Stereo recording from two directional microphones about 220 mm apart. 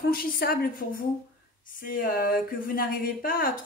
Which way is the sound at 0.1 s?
45° left (ahead or behind).